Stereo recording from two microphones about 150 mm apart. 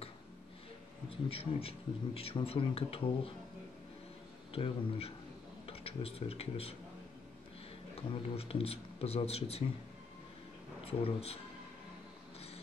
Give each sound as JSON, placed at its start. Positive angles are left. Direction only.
{"t": 1.1, "sound": "speech", "side_deg": 40}
{"t": 4.5, "sound": "speech", "side_deg": 40}
{"t": 7.9, "sound": "speech", "side_deg": 40}
{"t": 10.9, "sound": "speech", "side_deg": 40}